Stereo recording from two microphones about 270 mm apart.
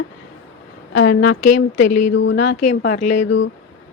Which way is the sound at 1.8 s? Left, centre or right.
Left.